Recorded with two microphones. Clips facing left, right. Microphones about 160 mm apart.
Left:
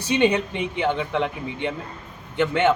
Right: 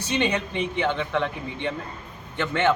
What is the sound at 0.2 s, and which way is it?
Speech, 15° left (ahead or behind).